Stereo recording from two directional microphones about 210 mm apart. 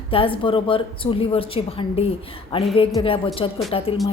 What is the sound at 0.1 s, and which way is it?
Music, 25° left (ahead or behind).